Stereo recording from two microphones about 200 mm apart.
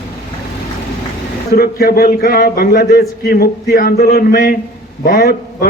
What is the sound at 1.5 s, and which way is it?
A man's voice, 50° left (ahead or behind).